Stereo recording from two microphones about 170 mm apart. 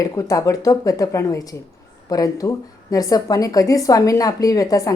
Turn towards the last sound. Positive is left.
turn(degrees=20)  # may be behind; listen again after turning